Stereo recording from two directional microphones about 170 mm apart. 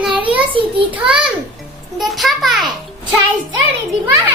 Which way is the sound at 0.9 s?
5° right (ahead or behind).